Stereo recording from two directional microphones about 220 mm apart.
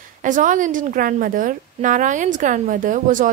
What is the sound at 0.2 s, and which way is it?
A woman's voice, 35° right (ahead or behind).